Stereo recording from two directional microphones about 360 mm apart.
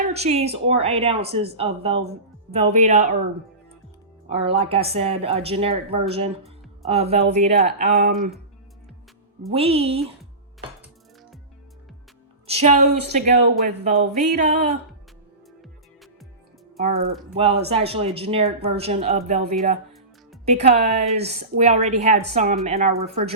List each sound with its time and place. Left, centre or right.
0.1 s speech: centre
4.3 s a woman's voice: centre
9.5 s speech: centre
12.5 s a woman's voice: centre
17.3 s speech: centre